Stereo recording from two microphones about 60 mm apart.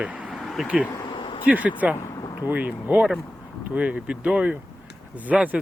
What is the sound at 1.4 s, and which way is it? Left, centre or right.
Speech, right.